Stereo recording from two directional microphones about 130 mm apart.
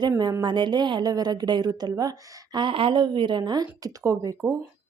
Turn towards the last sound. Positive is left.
turn(degrees=-25)  # may be behind; listen again after turning